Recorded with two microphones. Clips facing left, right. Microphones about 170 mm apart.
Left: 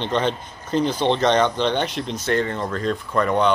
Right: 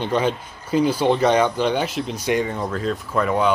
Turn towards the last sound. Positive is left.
turn(degrees=-5)  # may be behind; listen again after turning